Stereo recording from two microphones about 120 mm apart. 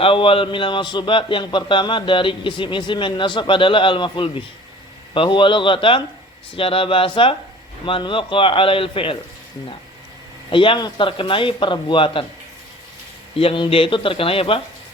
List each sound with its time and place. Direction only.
0.0 s a man's voice: 45° left (ahead or behind)
10.5 s a man's voice: 45° left (ahead or behind)
13.3 s a man's voice: 50° left (ahead or behind)